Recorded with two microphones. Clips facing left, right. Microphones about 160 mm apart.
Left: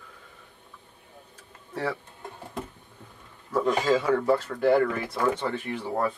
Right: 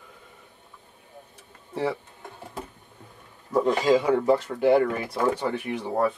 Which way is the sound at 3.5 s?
20° right (ahead or behind).